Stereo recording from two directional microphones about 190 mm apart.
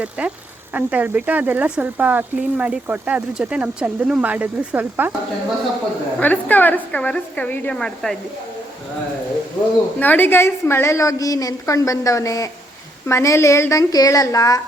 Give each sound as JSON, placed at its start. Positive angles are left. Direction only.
{"t": 0.2, "sound": "speech", "side_deg": -5}
{"t": 6.1, "sound": "a woman's voice", "side_deg": 10}
{"t": 10.0, "sound": "a woman's voice", "side_deg": 10}